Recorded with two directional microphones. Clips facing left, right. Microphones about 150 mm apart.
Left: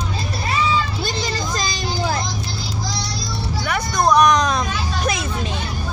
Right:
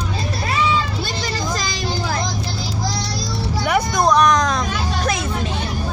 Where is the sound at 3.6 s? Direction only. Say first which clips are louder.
Right 6 dB; 15° right (ahead or behind).